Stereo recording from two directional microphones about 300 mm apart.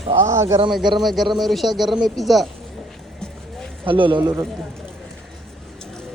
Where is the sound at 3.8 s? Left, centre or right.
Centre.